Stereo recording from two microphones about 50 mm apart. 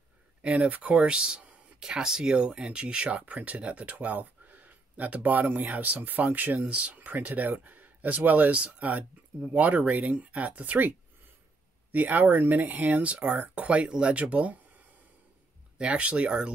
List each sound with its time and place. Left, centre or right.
0.4 s speech: right
15.8 s speech: right